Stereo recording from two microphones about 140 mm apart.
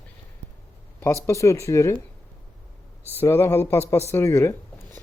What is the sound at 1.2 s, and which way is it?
Speech, 20° left (ahead or behind).